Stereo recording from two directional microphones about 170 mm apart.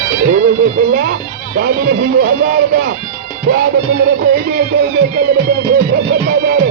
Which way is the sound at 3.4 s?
75° right (ahead or behind).